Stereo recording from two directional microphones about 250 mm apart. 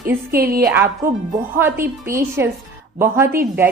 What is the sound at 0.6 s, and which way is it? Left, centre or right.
A woman's voice, centre.